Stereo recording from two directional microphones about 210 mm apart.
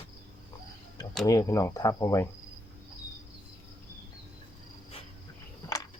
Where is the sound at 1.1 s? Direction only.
10° left (ahead or behind).